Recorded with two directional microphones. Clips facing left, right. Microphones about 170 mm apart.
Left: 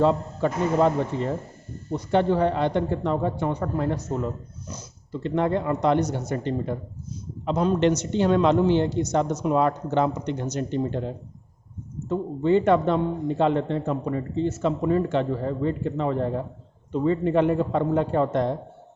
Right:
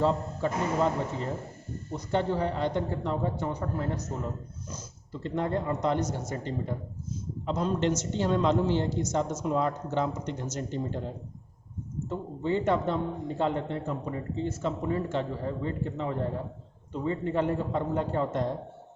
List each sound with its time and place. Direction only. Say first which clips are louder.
0.0 s speech: left 5 dB; 70° left (ahead or behind)
1.9 s speech: left 7 dB; 70° left (ahead or behind)